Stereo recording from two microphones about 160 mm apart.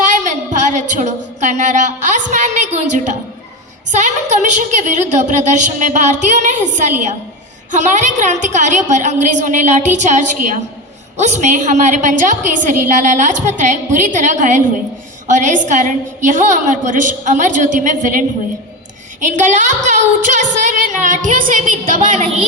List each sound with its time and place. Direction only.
0.0 s a sound: 50° right (ahead or behind)
3.9 s a woman's voice: 50° right (ahead or behind)
7.7 s a woman's voice: 50° right (ahead or behind)